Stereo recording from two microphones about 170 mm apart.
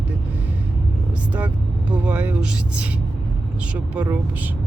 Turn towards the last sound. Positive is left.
turn(degrees=-10)  # may be behind; listen again after turning